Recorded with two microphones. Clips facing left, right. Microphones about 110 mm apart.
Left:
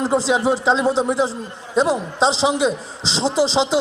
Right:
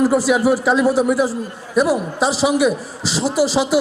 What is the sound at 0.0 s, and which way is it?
A man's voice, 20° left (ahead or behind).